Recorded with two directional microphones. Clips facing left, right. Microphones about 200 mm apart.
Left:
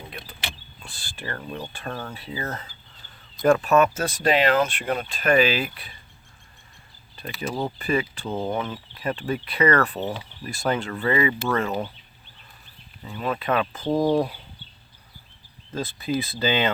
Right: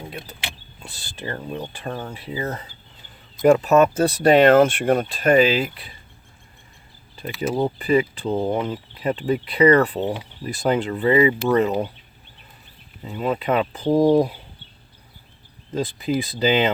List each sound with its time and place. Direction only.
0.2 s speech: 20° right (ahead or behind)
7.4 s speech: 20° right (ahead or behind)
13.0 s speech: 20° right (ahead or behind)
15.7 s speech: 15° right (ahead or behind)